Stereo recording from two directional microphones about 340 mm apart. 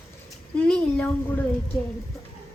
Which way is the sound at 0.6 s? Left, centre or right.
Centre.